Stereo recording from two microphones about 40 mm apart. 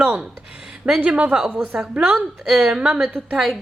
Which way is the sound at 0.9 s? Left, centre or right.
Centre.